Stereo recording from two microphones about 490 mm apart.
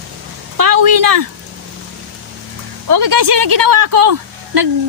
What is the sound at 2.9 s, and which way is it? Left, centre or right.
Speech, right.